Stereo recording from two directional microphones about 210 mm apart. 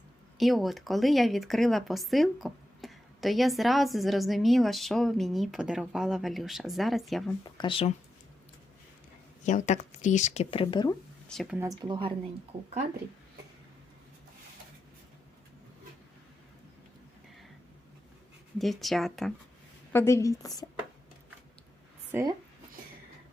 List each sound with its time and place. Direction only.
0.3 s speech: centre (ahead or behind)
7.6 s speech: 25° left (ahead or behind)
9.4 s speech: 35° left (ahead or behind)
11.3 s speech: centre (ahead or behind)
11.8 s a woman's voice: 25° right (ahead or behind)
18.6 s speech: centre (ahead or behind)
19.9 s a woman's voice: 10° left (ahead or behind)
22.1 s speech: 15° right (ahead or behind)